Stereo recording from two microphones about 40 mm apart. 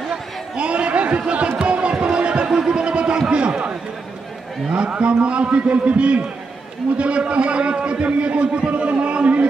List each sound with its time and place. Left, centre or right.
0.1 s chatter: right
1.6 s music: right
2.5 s a sound: centre
4.7 s a man's voice: right